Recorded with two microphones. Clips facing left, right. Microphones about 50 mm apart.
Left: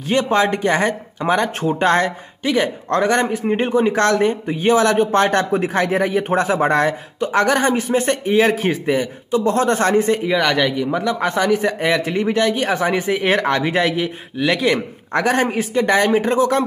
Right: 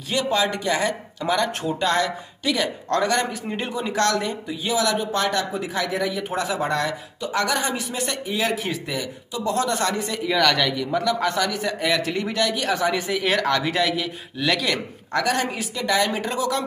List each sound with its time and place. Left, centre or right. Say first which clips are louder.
0.1 s speech: left 6 dB; left
10.3 s speech: right 1 dB; left